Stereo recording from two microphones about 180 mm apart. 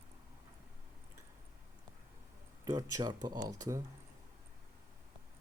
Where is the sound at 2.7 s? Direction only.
20° right (ahead or behind).